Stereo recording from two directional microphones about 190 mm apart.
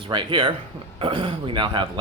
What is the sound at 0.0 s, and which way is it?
Speech, 25° right (ahead or behind).